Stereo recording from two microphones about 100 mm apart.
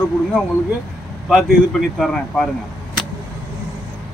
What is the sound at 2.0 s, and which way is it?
Speech, 10° left (ahead or behind).